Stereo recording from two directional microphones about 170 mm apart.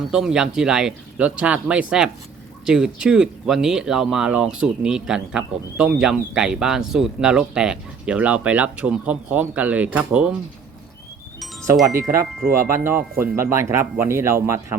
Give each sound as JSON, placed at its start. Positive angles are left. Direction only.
{"t": 0.1, "sound": "speech", "side_deg": -5}
{"t": 11.9, "sound": "speech", "side_deg": -20}